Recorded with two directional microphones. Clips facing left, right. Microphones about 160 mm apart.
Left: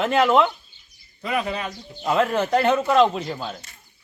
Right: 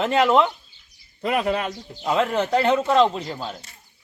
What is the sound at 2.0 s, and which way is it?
Speech, centre (ahead or behind).